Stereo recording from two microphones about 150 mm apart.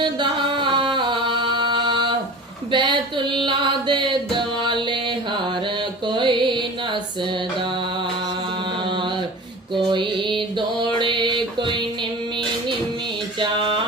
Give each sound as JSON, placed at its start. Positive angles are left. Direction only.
{"t": 0.0, "sound": "music", "side_deg": -30}
{"t": 9.7, "sound": "mantra", "side_deg": -30}